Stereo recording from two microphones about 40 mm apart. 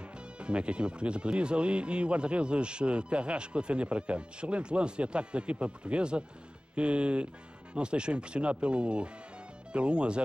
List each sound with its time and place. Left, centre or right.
0.4 s speech: right